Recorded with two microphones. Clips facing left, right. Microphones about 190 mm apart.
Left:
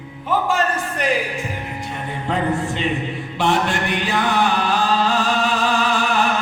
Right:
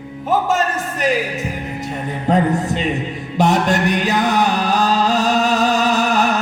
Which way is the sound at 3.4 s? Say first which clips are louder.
Right 4 dB; 40° right (ahead or behind).